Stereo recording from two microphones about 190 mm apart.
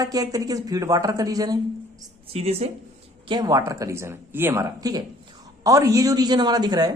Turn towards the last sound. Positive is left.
turn(degrees=-20)  # may be behind; listen again after turning